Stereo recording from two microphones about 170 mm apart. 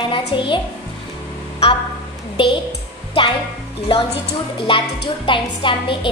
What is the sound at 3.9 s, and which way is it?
Speech, 30° left (ahead or behind).